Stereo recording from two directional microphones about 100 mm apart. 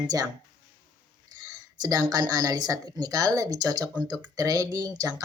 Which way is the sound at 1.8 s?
40° right (ahead or behind).